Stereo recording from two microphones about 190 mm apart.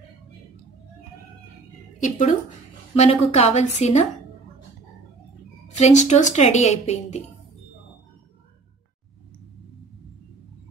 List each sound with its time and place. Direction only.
2.0 s speech: 40° left (ahead or behind)
2.9 s a woman's voice: 30° left (ahead or behind)
5.8 s a woman's voice: 35° left (ahead or behind)